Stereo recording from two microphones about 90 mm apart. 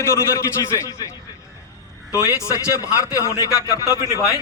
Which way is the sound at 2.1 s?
35° left (ahead or behind).